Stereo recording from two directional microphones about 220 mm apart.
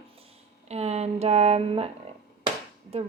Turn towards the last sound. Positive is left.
turn(degrees=-30)  # may be behind; listen again after turning